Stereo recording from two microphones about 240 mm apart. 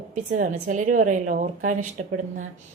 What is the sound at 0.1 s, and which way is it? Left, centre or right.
A woman's voice, right.